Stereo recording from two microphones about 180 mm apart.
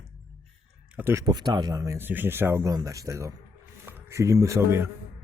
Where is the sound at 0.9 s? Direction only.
15° right (ahead or behind).